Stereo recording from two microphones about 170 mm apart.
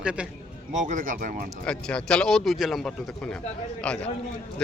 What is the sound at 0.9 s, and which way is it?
Speech, 50° right (ahead or behind).